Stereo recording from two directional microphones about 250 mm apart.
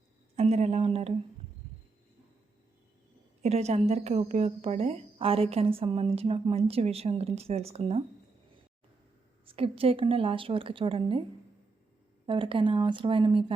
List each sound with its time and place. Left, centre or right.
0.3 s a woman's voice: right
3.4 s a woman's voice: right
9.5 s a woman's voice: right
12.2 s a woman's voice: centre